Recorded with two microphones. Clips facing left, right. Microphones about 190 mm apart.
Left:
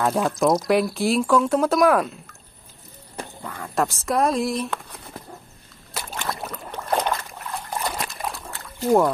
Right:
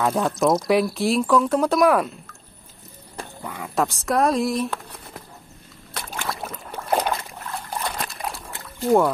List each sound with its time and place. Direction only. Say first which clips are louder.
0.0 s speech: even; centre (ahead or behind)
3.4 s speech: right 1 dB; 5° right (ahead or behind)
6.1 s boat: even; 5° right (ahead or behind)
8.0 s liquid: even; centre (ahead or behind)
8.8 s speech: even; centre (ahead or behind)